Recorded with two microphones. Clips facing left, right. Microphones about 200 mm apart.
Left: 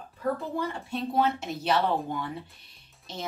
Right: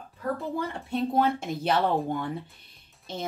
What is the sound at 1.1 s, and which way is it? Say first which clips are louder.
Speech: left 1 dB; 50° right (ahead or behind).